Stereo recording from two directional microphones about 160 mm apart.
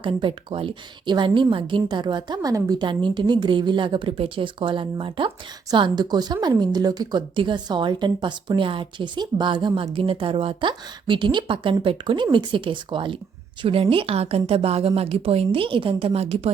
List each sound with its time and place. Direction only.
0.0 s a woman's voice: 30° right (ahead or behind)